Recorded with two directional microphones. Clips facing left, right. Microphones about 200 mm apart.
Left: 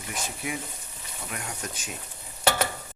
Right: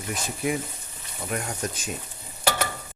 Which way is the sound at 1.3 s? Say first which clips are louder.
Right 8 dB; 40° right (ahead or behind).